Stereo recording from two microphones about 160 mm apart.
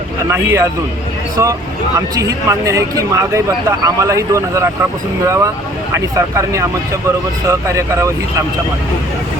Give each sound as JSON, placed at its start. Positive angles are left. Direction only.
{"t": 0.3, "sound": "speech", "side_deg": -15}